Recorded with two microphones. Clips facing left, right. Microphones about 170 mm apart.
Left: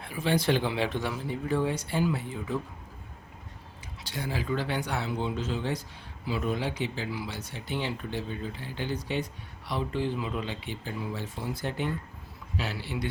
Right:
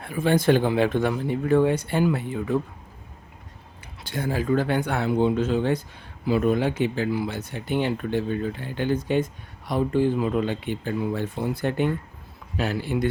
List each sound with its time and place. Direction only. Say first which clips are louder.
0.0 s speech: right 6 dB; 50° right (ahead or behind)
4.0 s speech: right 7 dB; 50° right (ahead or behind)